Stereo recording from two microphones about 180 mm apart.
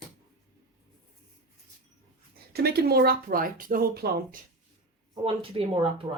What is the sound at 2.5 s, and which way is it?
Speech, 60° right (ahead or behind).